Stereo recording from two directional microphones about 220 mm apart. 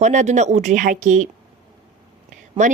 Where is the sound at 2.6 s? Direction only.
35° right (ahead or behind).